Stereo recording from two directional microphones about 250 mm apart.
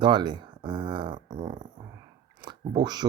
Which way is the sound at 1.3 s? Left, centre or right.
Right.